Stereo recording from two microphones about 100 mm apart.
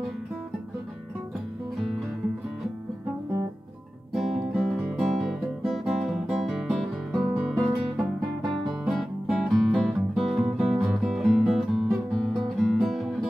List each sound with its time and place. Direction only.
4.1 s guitar: centre (ahead or behind)
8.8 s music: centre (ahead or behind)
10.8 s guitar: 5° right (ahead or behind)